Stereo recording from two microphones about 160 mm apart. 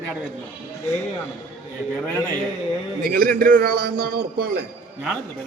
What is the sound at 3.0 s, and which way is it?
A man's voice, 65° right (ahead or behind).